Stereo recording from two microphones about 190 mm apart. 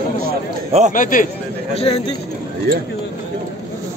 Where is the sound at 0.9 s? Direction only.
45° left (ahead or behind).